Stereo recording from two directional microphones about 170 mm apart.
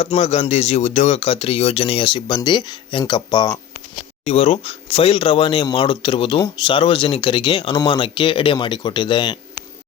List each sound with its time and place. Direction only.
0.0 s speech: 40° left (ahead or behind); by 3.6 s 25° left (ahead or behind)
4.3 s speech: 35° left (ahead or behind)